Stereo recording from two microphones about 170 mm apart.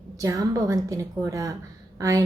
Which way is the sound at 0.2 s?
20° right (ahead or behind).